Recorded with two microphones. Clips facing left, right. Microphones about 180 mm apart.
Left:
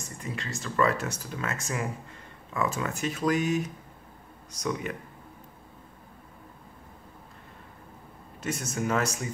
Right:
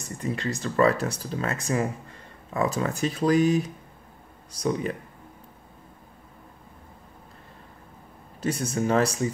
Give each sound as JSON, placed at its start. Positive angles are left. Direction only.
{"t": 0.2, "sound": "speech", "side_deg": -35}
{"t": 8.4, "sound": "speech", "side_deg": -30}